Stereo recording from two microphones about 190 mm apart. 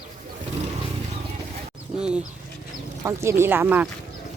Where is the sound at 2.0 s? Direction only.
5° right (ahead or behind).